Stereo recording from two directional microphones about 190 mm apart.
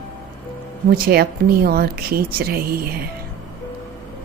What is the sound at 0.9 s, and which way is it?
Speech, 55° right (ahead or behind).